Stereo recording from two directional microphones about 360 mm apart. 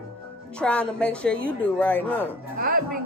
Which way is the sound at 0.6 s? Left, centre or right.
Centre.